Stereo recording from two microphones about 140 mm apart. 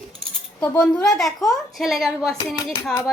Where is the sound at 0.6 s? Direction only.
10° left (ahead or behind).